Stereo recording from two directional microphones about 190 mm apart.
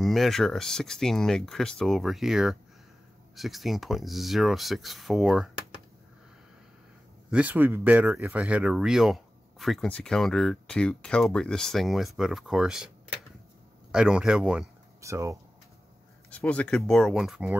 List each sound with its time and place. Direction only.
0.0 s speech: centre (ahead or behind)
7.2 s speech: 5° right (ahead or behind)
13.9 s speech: 5° right (ahead or behind)
15.0 s speech: 15° right (ahead or behind)
16.3 s speech: 5° left (ahead or behind)